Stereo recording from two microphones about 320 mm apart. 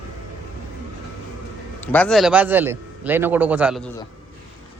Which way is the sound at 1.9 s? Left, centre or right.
Centre.